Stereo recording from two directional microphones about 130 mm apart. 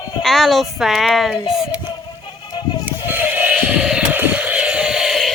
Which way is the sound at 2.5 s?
35° left (ahead or behind).